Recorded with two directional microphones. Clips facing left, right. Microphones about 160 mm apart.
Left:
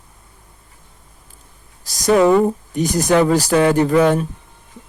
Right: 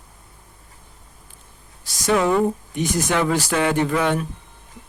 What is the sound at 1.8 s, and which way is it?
Speech, 40° left (ahead or behind).